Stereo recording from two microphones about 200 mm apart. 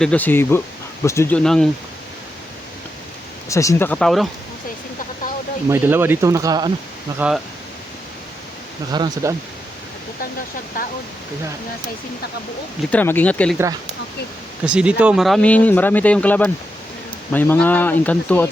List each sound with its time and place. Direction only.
0.0 s speech: 5° left (ahead or behind)
3.5 s speech: 15° left (ahead or behind)
5.6 s speech: 10° right (ahead or behind)
7.2 s speech: 5° right (ahead or behind)
8.9 s speech: 20° right (ahead or behind)
10.8 s speech: 45° left (ahead or behind)
12.9 s speech: 10° left (ahead or behind)
14.7 s speech: 5° right (ahead or behind)